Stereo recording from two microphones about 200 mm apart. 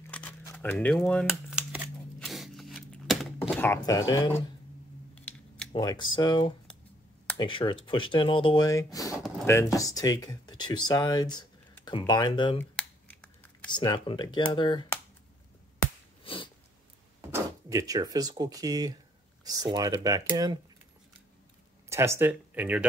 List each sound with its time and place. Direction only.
0.1 s crumpling: 10° left (ahead or behind)
2.1 s a sound: centre (ahead or behind)
3.4 s speech: 10° left (ahead or behind)
5.1 s typing: 5° left (ahead or behind)
5.7 s speech: 25° left (ahead or behind)
12.5 s computer keyboard: 10° left (ahead or behind)
13.7 s speech: 20° left (ahead or behind)
17.3 s speech: 15° right (ahead or behind)
21.8 s speech: 15° right (ahead or behind)